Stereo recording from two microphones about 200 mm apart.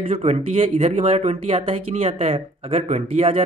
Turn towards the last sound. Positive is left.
turn(degrees=-30)  # may be behind; listen again after turning